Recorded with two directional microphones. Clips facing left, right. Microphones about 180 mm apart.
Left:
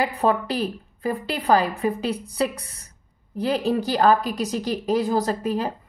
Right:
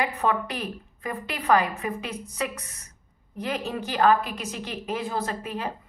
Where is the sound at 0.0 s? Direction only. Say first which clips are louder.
Left 4 dB; 35° left (ahead or behind).